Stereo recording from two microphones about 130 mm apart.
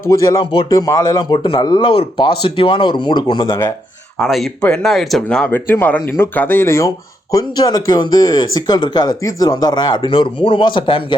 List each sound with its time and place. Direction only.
0.0 s speech: 25° left (ahead or behind)
3.5 s speech: 25° left (ahead or behind)
4.2 s speech: centre (ahead or behind); by 11.0 s 40° left (ahead or behind)